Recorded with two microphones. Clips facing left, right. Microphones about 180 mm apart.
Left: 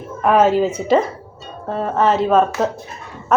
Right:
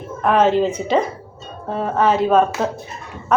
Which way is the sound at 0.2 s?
5° left (ahead or behind).